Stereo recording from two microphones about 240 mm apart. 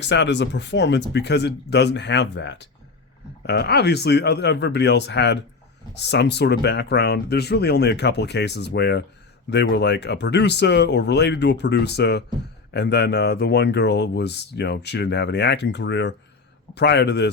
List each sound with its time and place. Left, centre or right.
0.0 s speech: left